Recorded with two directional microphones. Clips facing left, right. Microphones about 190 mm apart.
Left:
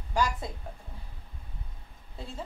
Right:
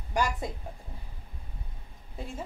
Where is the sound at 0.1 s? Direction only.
15° right (ahead or behind).